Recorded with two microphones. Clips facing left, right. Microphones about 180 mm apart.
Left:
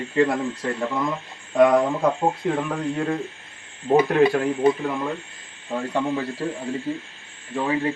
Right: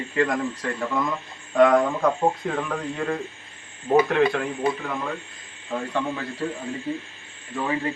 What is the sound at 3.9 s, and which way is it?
Speech, 15° left (ahead or behind).